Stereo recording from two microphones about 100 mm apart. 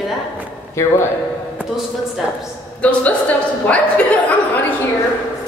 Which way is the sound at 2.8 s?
15° left (ahead or behind).